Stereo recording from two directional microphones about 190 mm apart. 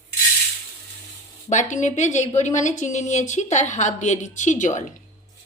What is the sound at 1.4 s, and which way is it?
A woman's voice, 40° left (ahead or behind).